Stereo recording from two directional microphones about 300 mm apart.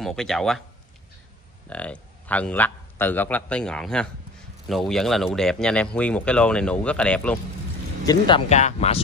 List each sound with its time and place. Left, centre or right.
0.0 s speech: centre
1.7 s a man's voice: centre
8.0 s speech: centre